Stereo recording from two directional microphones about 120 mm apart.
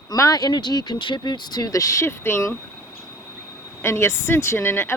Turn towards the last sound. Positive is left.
turn(degrees=20)  # may be behind; listen again after turning